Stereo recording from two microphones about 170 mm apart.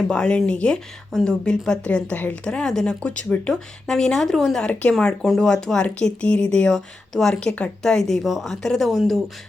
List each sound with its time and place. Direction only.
0.1 s speech: 5° left (ahead or behind)